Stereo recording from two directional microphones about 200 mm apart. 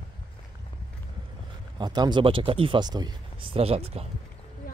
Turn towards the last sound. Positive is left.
turn(degrees=-30)  # may be behind; listen again after turning